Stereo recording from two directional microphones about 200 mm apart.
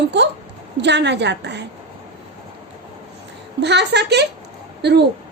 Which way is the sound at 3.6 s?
60° right (ahead or behind).